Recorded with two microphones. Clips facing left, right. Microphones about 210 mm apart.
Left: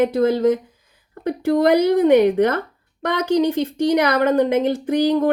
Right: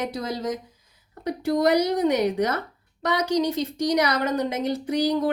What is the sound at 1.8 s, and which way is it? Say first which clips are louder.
Speech: left 8 dB; 55° left (ahead or behind).